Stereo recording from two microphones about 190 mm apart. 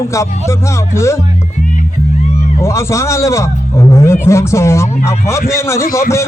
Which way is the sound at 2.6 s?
15° left (ahead or behind).